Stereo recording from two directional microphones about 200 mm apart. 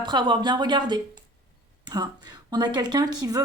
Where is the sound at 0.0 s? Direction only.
20° right (ahead or behind).